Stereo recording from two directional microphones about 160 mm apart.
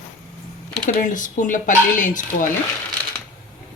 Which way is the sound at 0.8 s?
55° left (ahead or behind).